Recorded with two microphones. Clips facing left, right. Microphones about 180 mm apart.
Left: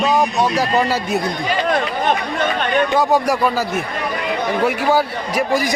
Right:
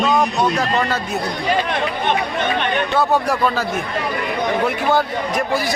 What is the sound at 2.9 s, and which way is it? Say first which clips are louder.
Speech: right 1 dB; 10° left (ahead or behind).